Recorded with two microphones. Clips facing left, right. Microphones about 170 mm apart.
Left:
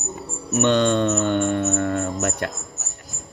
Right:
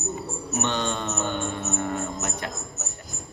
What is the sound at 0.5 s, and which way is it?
Speech, 70° left (ahead or behind).